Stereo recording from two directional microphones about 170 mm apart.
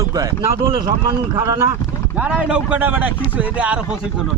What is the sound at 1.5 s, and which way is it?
Speech, 15° right (ahead or behind).